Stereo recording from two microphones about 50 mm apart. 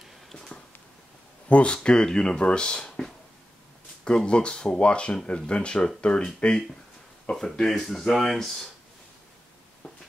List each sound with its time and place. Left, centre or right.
0.3 s a sound: centre
1.5 s speech: left
4.3 s speech: centre